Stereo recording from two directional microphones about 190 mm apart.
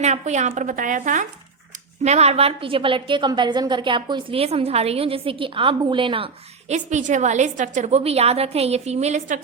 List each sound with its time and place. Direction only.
0.0 s a woman's voice: 35° right (ahead or behind)